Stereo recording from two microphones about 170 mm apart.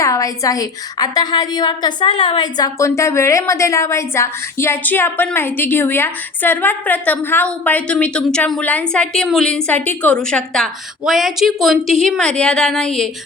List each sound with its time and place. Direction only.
0.0 s a woman's voice: 20° left (ahead or behind); by 13.1 s centre (ahead or behind)